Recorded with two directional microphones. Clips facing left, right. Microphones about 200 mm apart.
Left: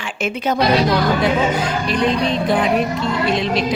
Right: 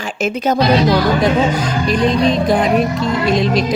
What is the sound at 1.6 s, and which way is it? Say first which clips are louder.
Speech: right 3 dB; 40° right (ahead or behind).